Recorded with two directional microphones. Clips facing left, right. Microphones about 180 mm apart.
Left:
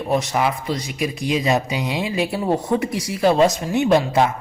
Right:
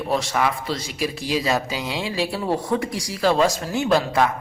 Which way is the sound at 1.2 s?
Centre (ahead or behind).